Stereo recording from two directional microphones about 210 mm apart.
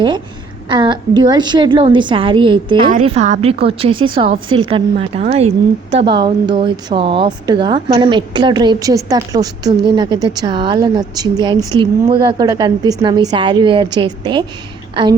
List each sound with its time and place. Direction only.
0.7 s speech: 20° right (ahead or behind)